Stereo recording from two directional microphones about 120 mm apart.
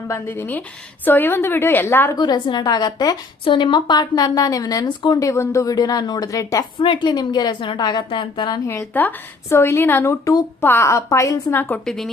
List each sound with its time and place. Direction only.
0.1 s a woman's voice: 20° left (ahead or behind)
2.1 s a woman's voice: 35° left (ahead or behind)
3.4 s a woman's voice: 45° left (ahead or behind); by 6.7 s 25° left (ahead or behind)
6.7 s a woman's voice: 45° left (ahead or behind)
8.6 s a woman's voice: 25° left (ahead or behind)
8.9 s a woman's voice: 15° left (ahead or behind)
11.9 s a woman's voice: centre (ahead or behind)